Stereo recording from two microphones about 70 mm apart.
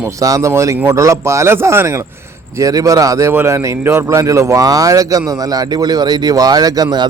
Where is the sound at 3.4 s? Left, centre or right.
Right.